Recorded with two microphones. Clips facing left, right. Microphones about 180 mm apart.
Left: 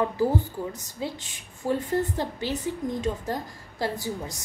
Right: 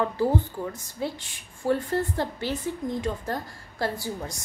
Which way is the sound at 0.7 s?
20° left (ahead or behind).